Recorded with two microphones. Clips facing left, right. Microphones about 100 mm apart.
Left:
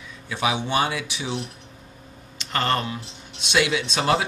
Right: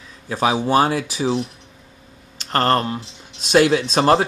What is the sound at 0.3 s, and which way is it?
Speech, 40° right (ahead or behind).